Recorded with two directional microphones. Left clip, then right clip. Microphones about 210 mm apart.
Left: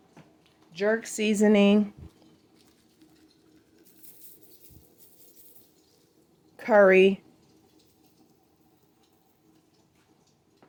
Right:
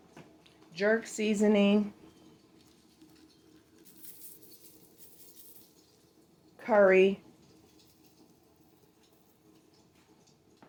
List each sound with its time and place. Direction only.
0.7 s speech: 20° left (ahead or behind)
1.0 s speech: 40° left (ahead or behind)
6.6 s speech: 50° left (ahead or behind)